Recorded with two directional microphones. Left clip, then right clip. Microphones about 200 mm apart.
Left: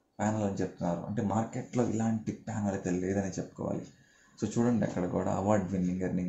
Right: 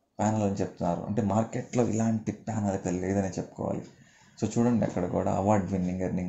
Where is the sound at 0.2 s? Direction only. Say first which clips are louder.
Right 4 dB; 25° right (ahead or behind).